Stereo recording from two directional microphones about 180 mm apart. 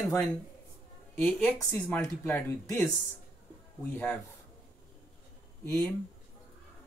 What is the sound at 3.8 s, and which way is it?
Speech, 10° left (ahead or behind).